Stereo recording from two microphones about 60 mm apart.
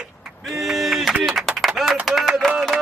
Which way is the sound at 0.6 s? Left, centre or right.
Centre.